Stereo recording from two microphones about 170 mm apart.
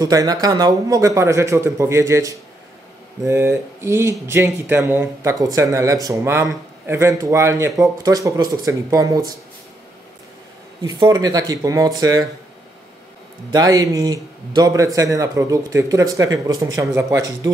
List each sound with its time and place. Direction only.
0.0 s speech: 20° right (ahead or behind)
10.8 s speech: 20° right (ahead or behind)
13.5 s speech: 20° right (ahead or behind)